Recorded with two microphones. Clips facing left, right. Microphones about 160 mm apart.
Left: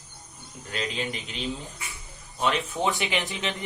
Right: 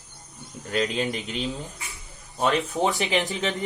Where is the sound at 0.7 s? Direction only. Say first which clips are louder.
Right 6 dB; 45° right (ahead or behind).